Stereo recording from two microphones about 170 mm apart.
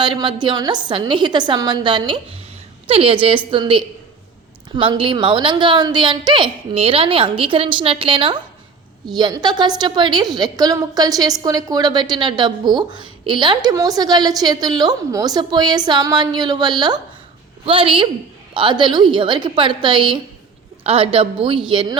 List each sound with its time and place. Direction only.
0.0 s a woman's voice: 25° right (ahead or behind)